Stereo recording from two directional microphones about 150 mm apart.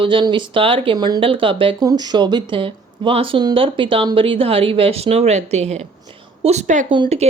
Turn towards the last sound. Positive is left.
turn(degrees=-40)  # may be behind; listen again after turning